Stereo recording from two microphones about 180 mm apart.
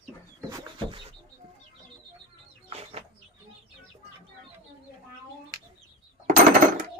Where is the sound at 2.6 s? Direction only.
35° right (ahead or behind).